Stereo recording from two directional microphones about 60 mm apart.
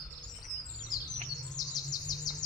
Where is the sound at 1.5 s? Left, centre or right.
Left.